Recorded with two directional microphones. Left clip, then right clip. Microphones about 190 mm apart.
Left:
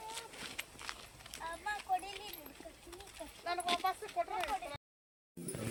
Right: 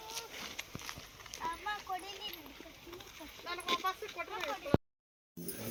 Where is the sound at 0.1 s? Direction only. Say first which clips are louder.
Right 2 dB; centre (ahead or behind).